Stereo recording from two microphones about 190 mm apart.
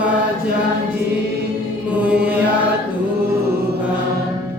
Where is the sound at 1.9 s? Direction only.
5° right (ahead or behind).